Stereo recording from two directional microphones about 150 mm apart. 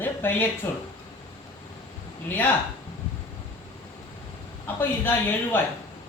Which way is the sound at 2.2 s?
15° left (ahead or behind).